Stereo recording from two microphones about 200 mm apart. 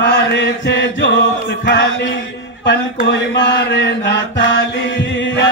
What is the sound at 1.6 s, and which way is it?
Music, 55° left (ahead or behind).